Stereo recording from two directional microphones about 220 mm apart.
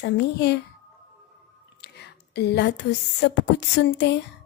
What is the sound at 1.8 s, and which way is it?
Speech, 50° left (ahead or behind).